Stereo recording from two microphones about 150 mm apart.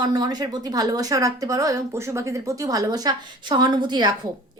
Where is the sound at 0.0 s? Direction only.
25° right (ahead or behind).